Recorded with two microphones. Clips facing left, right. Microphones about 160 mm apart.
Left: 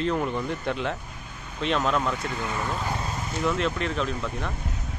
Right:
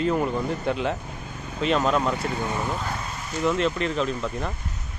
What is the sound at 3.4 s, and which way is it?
Speech, centre (ahead or behind).